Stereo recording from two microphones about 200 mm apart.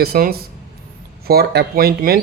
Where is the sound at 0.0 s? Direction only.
50° right (ahead or behind).